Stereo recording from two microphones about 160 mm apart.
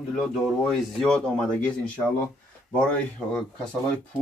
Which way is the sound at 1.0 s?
5° left (ahead or behind).